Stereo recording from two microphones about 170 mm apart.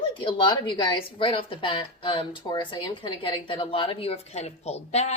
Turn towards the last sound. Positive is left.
turn(degrees=40)  # may be behind; listen again after turning